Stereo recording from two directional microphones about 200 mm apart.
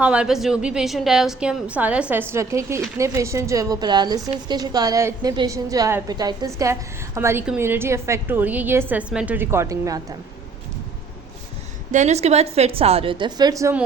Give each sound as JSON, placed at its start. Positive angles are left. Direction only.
{"t": 0.0, "sound": "a woman's voice", "side_deg": -5}
{"t": 11.9, "sound": "a woman's voice", "side_deg": -35}